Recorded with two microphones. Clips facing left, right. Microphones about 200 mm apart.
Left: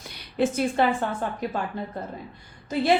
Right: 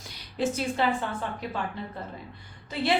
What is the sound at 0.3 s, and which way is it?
Speech, 55° left (ahead or behind).